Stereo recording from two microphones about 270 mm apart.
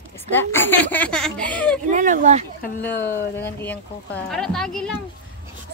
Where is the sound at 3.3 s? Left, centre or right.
Centre.